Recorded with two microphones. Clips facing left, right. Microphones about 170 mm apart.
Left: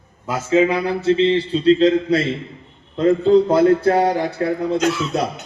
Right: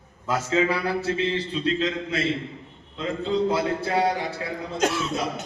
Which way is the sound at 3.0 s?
45° left (ahead or behind).